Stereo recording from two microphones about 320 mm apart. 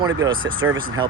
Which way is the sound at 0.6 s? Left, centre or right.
Right.